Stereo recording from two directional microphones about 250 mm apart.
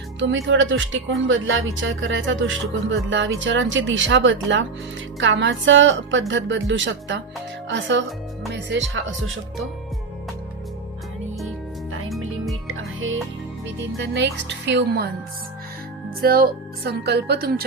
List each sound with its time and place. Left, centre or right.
0.2 s speech: right
12.7 s music: right
14.0 s speech: right
16.2 s a woman's voice: right